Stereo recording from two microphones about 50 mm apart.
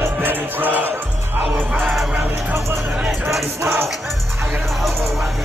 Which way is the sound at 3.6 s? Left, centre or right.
Right.